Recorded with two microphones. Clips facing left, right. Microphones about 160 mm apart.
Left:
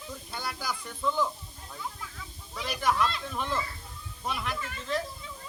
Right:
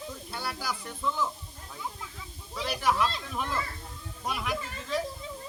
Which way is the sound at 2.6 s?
5° right (ahead or behind).